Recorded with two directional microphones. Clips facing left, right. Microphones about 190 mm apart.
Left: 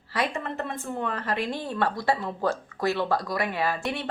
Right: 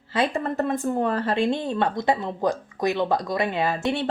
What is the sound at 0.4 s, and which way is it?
Speech, 40° right (ahead or behind).